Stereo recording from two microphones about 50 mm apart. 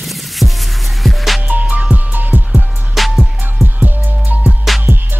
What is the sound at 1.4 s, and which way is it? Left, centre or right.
Music, right.